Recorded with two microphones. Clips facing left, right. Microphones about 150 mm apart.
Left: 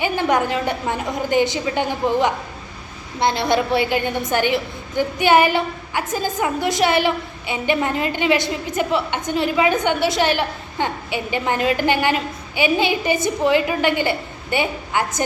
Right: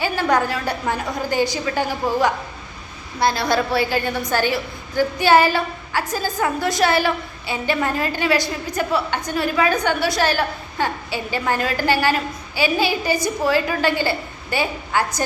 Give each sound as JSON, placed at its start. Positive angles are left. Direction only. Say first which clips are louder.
{"t": 0.0, "sound": "a woman's voice", "louder": "even", "side_deg": 20}